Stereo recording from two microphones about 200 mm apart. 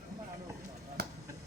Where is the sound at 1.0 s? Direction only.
50° right (ahead or behind).